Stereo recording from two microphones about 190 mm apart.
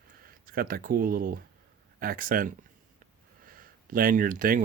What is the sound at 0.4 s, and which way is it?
Speech, 50° right (ahead or behind).